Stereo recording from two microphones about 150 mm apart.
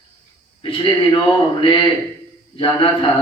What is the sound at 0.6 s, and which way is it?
A man's voice, 35° left (ahead or behind).